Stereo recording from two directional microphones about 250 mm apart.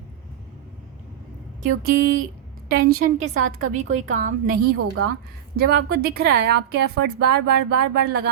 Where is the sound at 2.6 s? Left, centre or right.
Right.